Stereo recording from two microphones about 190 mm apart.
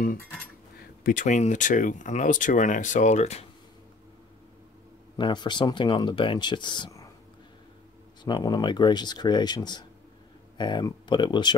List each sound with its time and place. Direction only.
1.0 s speech: 45° left (ahead or behind)
5.1 s speech: 25° left (ahead or behind)
8.2 s speech: 20° left (ahead or behind)